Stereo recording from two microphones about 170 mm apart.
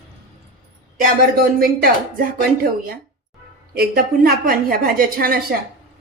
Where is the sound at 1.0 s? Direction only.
60° right (ahead or behind).